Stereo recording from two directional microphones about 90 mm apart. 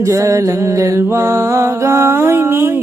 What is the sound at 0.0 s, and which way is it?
Music, 35° right (ahead or behind).